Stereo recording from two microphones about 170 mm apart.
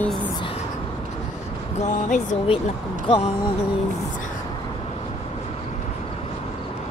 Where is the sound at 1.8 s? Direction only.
45° left (ahead or behind).